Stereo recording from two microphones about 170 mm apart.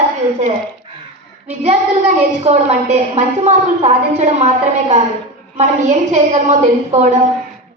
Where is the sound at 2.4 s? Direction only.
40° right (ahead or behind).